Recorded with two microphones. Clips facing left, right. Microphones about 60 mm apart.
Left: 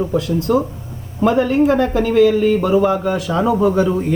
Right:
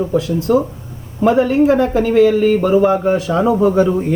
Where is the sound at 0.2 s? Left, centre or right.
Right.